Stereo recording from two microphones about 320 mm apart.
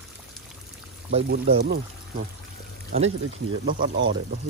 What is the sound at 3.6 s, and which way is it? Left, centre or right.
Speech, right.